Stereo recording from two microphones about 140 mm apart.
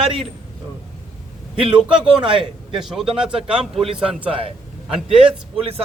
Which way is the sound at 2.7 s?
Centre (ahead or behind).